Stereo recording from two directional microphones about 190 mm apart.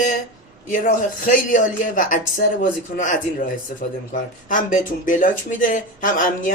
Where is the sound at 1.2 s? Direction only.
45° left (ahead or behind).